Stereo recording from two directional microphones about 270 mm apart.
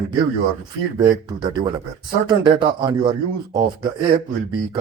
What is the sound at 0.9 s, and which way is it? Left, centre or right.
Speech, centre.